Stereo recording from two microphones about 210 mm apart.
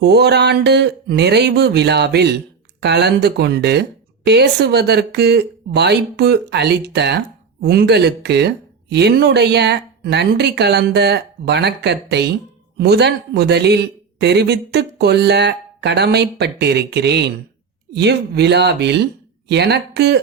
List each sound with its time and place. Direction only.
0.0 s speech: 50° right (ahead or behind)